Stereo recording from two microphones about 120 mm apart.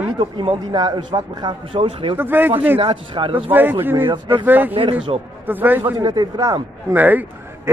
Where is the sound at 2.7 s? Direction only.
45° right (ahead or behind).